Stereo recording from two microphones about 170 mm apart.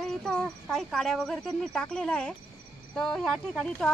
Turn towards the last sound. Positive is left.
turn(degrees=5)  # may be behind; listen again after turning